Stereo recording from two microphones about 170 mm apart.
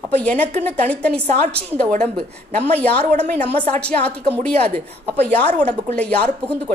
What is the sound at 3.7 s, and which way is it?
A woman's voice, 10° left (ahead or behind).